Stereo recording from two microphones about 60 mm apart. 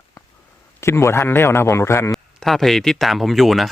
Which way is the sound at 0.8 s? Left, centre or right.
Left.